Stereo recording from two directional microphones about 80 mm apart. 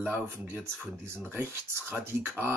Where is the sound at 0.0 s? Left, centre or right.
Right.